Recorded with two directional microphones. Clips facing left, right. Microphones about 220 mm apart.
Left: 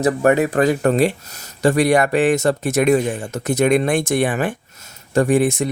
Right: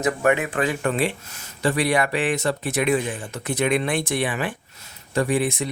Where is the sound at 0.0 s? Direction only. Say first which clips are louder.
Left 5 dB; 40° left (ahead or behind).